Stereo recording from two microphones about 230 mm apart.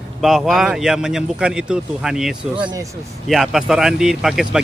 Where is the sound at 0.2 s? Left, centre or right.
Centre.